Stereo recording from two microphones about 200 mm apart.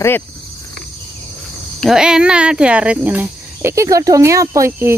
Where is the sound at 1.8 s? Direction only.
5° right (ahead or behind).